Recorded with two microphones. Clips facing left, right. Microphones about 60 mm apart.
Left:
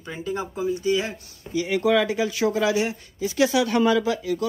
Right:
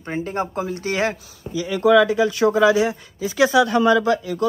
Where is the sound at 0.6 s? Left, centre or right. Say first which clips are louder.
Left 2 dB; right.